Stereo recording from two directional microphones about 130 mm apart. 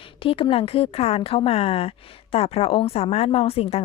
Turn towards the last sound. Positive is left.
turn(degrees=50)  # may be behind; listen again after turning